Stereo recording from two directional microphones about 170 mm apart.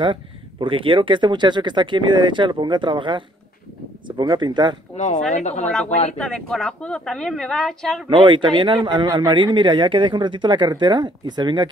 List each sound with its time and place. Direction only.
0.0 s speech: 30° right (ahead or behind)
4.9 s a woman's voice: 45° left (ahead or behind)
6.1 s speech: 5° left (ahead or behind)
8.1 s speech: 30° right (ahead or behind)